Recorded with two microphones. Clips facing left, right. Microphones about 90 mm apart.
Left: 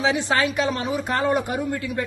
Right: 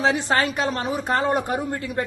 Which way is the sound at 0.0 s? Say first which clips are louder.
Right 1 dB; 40° right (ahead or behind).